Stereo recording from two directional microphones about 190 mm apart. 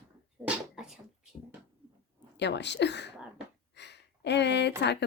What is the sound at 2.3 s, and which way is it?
Speech, 65° left (ahead or behind).